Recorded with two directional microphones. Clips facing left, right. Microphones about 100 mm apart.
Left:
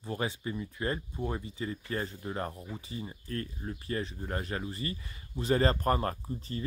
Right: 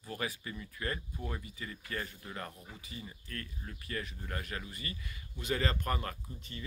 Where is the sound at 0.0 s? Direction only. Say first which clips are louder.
Left 5 dB; 25° left (ahead or behind).